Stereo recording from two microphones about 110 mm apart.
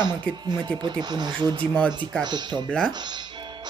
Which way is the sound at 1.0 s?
40° right (ahead or behind).